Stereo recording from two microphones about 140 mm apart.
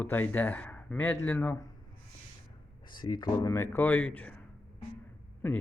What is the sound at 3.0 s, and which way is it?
Speech, 30° left (ahead or behind).